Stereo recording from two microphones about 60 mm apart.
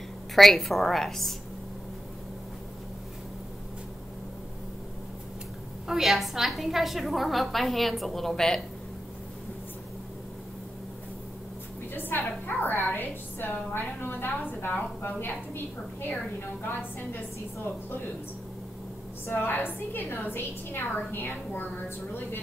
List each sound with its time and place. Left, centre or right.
0.4 s a woman's voice: centre
5.9 s a woman's voice: centre
11.9 s a woman's voice: left
19.2 s a woman's voice: left